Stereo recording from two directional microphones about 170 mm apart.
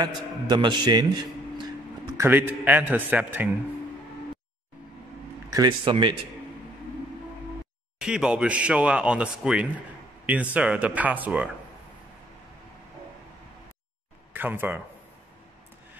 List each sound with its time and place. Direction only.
0.0 s a man's voice: 25° right (ahead or behind)
2.1 s a man's voice: 10° right (ahead or behind)
5.5 s a man's voice: 25° right (ahead or behind)
8.0 s a man's voice: 5° right (ahead or behind)
14.3 s speech: 10° right (ahead or behind)